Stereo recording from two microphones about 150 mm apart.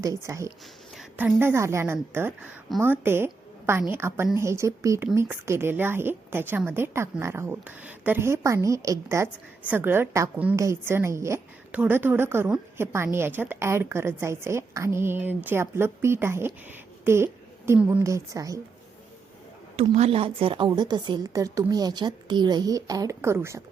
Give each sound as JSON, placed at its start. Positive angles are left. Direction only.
{"t": 0.0, "sound": "a woman's voice", "side_deg": -20}
{"t": 17.7, "sound": "a woman's voice", "side_deg": -10}
{"t": 19.7, "sound": "a woman's voice", "side_deg": -45}